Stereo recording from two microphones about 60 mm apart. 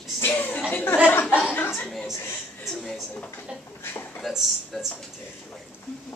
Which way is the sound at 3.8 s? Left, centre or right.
Left.